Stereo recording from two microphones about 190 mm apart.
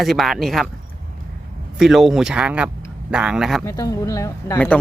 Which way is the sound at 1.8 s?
Centre (ahead or behind).